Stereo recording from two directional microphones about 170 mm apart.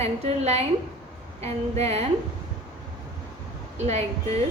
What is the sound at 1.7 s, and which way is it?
Speech, 40° right (ahead or behind).